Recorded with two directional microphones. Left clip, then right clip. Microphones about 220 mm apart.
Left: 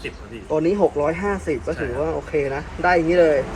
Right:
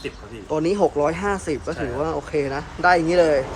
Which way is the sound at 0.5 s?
10° right (ahead or behind).